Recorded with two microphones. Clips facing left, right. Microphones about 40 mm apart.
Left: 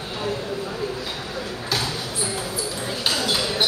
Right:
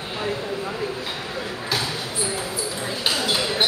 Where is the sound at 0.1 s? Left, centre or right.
Right.